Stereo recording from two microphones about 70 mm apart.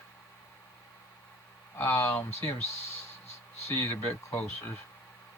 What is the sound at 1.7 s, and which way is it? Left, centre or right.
Speech, left.